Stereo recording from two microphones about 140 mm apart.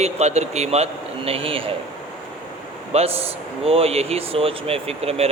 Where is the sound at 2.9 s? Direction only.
45° right (ahead or behind).